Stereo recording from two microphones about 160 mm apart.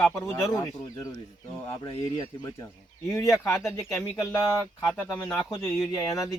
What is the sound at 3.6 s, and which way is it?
Speech, 20° left (ahead or behind).